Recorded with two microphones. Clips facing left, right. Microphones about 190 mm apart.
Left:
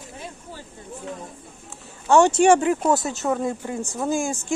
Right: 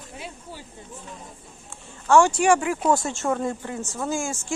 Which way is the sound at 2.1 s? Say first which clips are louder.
Left 2 dB; 20° left (ahead or behind).